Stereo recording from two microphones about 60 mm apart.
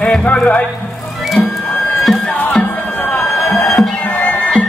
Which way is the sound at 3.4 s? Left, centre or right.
Left.